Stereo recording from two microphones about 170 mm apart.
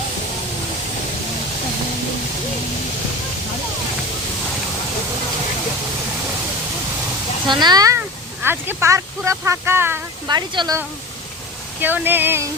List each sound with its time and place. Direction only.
7.4 s speech: 25° right (ahead or behind)
10.2 s speech: 25° right (ahead or behind)
11.8 s speech: 10° right (ahead or behind)